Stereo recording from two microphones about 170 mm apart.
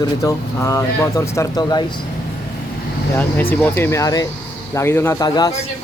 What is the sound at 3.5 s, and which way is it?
Speech, 10° left (ahead or behind).